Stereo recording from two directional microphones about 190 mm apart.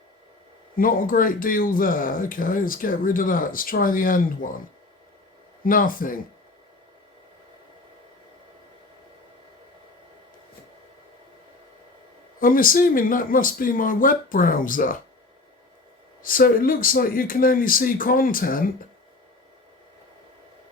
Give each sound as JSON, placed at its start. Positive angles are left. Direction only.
{"t": 0.8, "sound": "speech", "side_deg": 45}
{"t": 5.6, "sound": "speech", "side_deg": 45}
{"t": 12.4, "sound": "speech", "side_deg": 45}
{"t": 16.2, "sound": "speech", "side_deg": 50}